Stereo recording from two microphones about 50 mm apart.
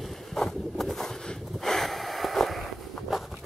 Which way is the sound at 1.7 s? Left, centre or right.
Centre.